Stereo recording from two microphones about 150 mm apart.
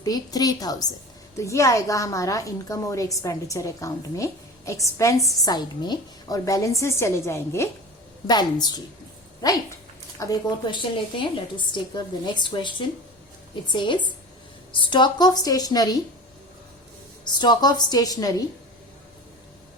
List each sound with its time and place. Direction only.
0.0 s a woman's voice: 25° left (ahead or behind)
10.2 s a woman's voice: 30° left (ahead or behind)
17.2 s a woman's voice: 30° left (ahead or behind)